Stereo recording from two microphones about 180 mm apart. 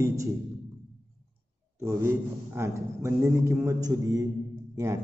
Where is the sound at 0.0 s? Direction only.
20° right (ahead or behind).